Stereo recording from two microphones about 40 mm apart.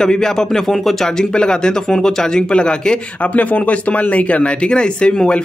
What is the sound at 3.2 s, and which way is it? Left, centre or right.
Speech, left.